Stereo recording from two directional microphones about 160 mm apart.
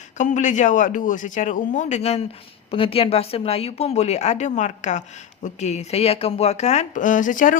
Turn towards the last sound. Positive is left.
turn(degrees=55)  # may be behind; listen again after turning